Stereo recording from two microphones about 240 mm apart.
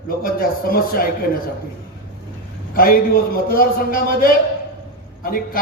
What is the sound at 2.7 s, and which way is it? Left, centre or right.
A man's voice, left.